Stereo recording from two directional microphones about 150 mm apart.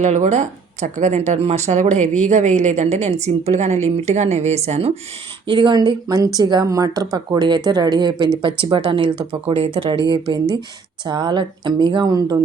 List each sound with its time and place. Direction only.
0.0 s speech: 50° right (ahead or behind)
5.5 s speech: 30° right (ahead or behind)